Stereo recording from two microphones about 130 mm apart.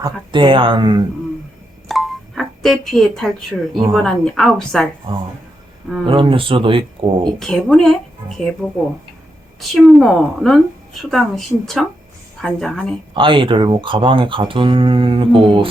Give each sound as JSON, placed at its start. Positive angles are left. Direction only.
{"t": 0.0, "sound": "speech", "side_deg": -40}
{"t": 1.9, "sound": "music", "side_deg": 0}
{"t": 3.9, "sound": "speech", "side_deg": 5}
{"t": 6.1, "sound": "speech", "side_deg": -40}
{"t": 7.3, "sound": "a woman's voice", "side_deg": 5}
{"t": 13.1, "sound": "speech", "side_deg": -40}